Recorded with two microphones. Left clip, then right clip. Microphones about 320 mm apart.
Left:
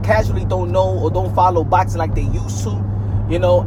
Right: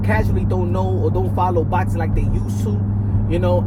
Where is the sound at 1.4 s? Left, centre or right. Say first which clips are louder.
Left 7 dB; centre.